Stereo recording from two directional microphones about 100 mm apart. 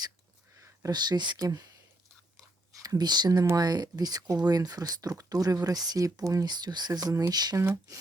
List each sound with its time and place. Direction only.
0.5 s speech: 35° right (ahead or behind)
2.8 s speech: 40° right (ahead or behind)